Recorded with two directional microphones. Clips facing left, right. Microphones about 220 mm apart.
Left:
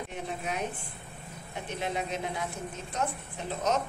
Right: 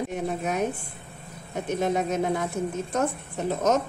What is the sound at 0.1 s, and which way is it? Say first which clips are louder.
Speech: right 7 dB; 45° right (ahead or behind).